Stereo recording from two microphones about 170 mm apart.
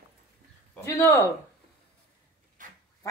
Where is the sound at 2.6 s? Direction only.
50° right (ahead or behind).